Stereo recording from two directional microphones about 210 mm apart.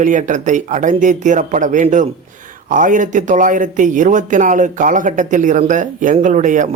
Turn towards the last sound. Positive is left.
turn(degrees=-35)  # may be behind; listen again after turning